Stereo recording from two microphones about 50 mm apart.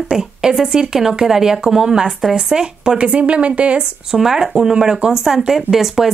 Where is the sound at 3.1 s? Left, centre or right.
Right.